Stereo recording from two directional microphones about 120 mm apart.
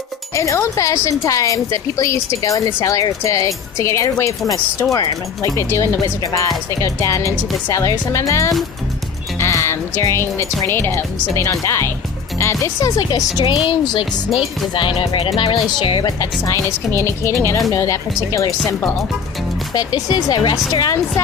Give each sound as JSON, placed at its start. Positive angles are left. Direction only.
{"t": 0.3, "sound": "speech", "side_deg": 25}
{"t": 9.4, "sound": "music", "side_deg": 25}
{"t": 10.6, "sound": "speech", "side_deg": 20}
{"t": 13.7, "sound": "speech", "side_deg": 45}
{"t": 16.6, "sound": "speech", "side_deg": 20}
{"t": 19.7, "sound": "speech", "side_deg": 35}